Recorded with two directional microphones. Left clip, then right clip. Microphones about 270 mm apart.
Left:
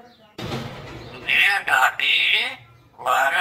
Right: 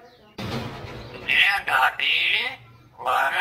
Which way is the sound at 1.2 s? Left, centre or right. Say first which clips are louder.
Left 1 dB; centre.